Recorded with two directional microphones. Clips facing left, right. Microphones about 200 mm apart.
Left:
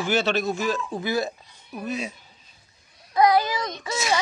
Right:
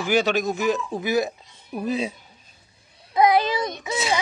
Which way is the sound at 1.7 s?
30° right (ahead or behind).